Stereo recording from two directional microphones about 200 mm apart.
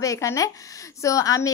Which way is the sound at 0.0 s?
15° left (ahead or behind).